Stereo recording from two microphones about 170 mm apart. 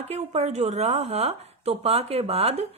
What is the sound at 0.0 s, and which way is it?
A woman's voice, 40° right (ahead or behind).